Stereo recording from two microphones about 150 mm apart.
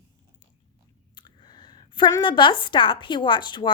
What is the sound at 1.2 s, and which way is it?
A woman's voice, 30° left (ahead or behind).